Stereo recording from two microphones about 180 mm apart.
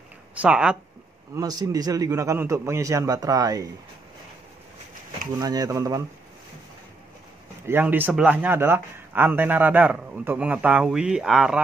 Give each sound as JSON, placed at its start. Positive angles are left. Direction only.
{"t": 0.3, "sound": "speech", "side_deg": -5}
{"t": 1.3, "sound": "a man's voice", "side_deg": -20}
{"t": 5.4, "sound": "speech", "side_deg": -20}
{"t": 7.6, "sound": "speech", "side_deg": -10}